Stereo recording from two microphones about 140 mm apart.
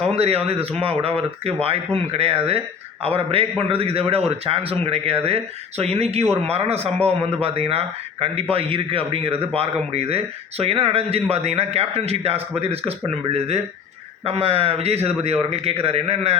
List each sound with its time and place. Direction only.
0.0 s a man's voice: 45° right (ahead or behind)
14.3 s a man's voice: 45° right (ahead or behind)